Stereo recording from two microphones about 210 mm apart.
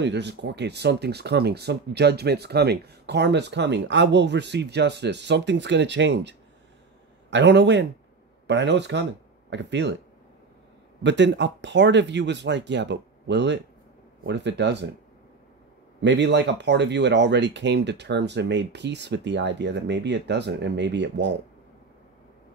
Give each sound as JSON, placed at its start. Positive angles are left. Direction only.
{"t": 0.0, "sound": "speech", "side_deg": -55}
{"t": 11.0, "sound": "speech", "side_deg": -55}
{"t": 16.0, "sound": "speech", "side_deg": -55}